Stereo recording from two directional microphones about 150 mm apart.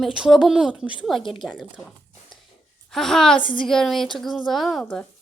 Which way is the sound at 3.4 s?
35° left (ahead or behind).